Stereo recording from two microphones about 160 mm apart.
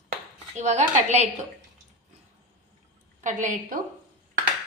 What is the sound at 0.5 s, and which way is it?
Speech, 45° right (ahead or behind).